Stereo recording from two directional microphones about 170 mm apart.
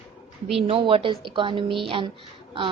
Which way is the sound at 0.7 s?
30° right (ahead or behind).